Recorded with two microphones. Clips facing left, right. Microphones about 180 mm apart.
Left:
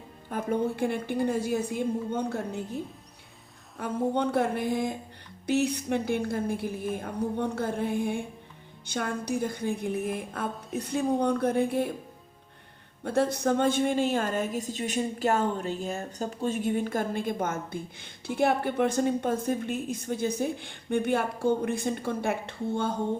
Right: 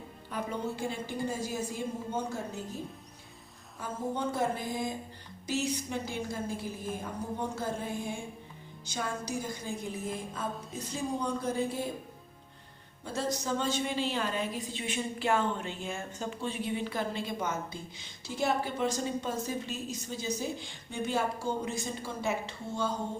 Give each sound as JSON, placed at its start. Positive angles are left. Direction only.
{"t": 0.3, "sound": "a woman's voice", "side_deg": 50}
{"t": 3.8, "sound": "a woman's voice", "side_deg": 65}
{"t": 13.1, "sound": "a woman's voice", "side_deg": 60}